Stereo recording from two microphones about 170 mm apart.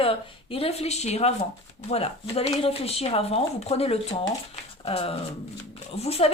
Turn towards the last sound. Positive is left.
turn(degrees=35)  # may be behind; listen again after turning